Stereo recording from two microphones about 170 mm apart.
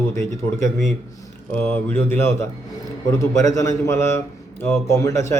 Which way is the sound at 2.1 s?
15° left (ahead or behind).